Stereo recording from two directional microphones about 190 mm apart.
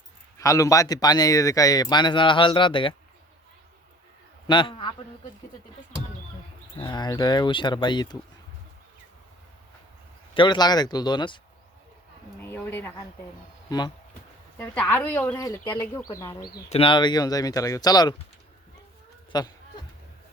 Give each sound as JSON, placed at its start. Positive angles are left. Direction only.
{"t": 0.3, "sound": "a man's voice", "side_deg": 15}
{"t": 4.4, "sound": "a man's voice", "side_deg": 25}
{"t": 6.7, "sound": "a man's voice", "side_deg": 25}
{"t": 10.3, "sound": "a man's voice", "side_deg": 25}
{"t": 12.4, "sound": "speech", "side_deg": 10}
{"t": 13.7, "sound": "speech", "side_deg": 20}
{"t": 14.6, "sound": "speech", "side_deg": 10}
{"t": 16.6, "sound": "a man's voice", "side_deg": 30}
{"t": 19.3, "sound": "a man's voice", "side_deg": 20}